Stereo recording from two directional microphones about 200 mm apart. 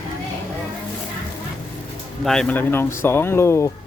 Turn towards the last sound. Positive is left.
turn(degrees=15)  # may be behind; listen again after turning